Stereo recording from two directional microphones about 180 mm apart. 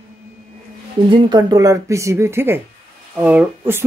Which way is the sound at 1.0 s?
25° right (ahead or behind).